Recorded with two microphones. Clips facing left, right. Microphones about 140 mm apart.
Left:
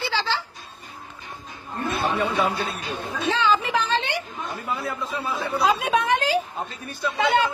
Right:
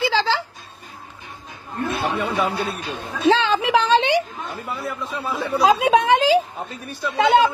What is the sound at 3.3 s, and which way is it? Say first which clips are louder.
Speech: right 5 dB; 90° right.